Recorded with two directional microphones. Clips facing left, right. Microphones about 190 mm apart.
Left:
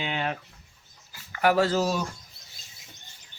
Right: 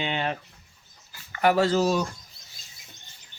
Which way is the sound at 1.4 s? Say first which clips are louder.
Right 1 dB; 5° left (ahead or behind).